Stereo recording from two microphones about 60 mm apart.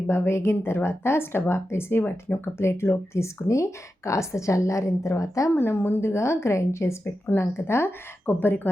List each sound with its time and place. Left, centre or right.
0.1 s speech: left
3.2 s a woman's voice: left
5.5 s a woman's voice: left